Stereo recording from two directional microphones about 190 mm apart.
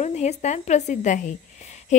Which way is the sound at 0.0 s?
35° left (ahead or behind).